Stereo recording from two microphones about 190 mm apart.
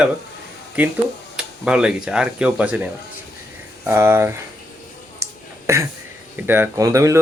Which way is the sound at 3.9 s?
10° right (ahead or behind).